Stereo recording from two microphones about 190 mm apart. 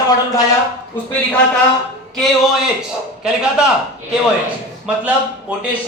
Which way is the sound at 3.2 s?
5° right (ahead or behind).